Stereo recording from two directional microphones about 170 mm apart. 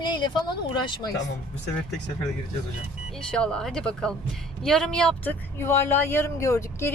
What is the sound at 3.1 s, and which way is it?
A woman's voice, 5° left (ahead or behind).